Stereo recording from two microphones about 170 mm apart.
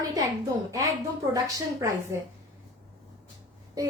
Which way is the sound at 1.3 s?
20° right (ahead or behind).